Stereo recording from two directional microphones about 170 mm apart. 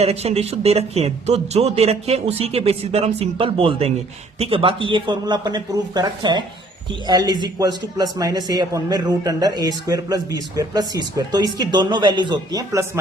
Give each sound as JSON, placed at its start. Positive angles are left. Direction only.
{"t": 0.0, "sound": "a man's voice", "side_deg": -40}